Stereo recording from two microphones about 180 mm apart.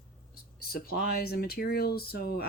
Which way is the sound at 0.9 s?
60° left (ahead or behind).